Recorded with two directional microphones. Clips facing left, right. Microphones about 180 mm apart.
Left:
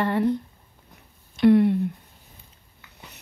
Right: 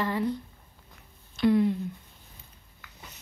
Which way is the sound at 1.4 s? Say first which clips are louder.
Left 6 dB; 60° left (ahead or behind).